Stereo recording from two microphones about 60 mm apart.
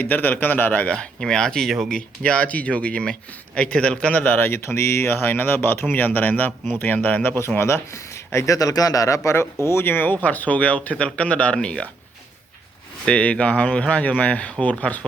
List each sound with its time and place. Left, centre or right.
0.0 s speech: left
0.9 s speech: centre
4.2 s speech: left
9.6 s speech: left; by 11.9 s centre
13.1 s speech: centre